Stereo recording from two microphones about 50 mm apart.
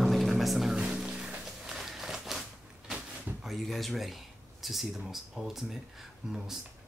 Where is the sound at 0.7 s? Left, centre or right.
Centre.